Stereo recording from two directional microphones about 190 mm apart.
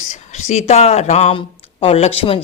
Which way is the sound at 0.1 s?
35° left (ahead or behind).